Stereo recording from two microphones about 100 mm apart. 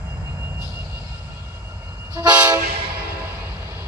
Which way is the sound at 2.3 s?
15° right (ahead or behind).